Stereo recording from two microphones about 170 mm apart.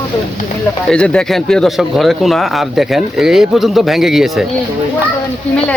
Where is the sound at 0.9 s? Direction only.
5° left (ahead or behind).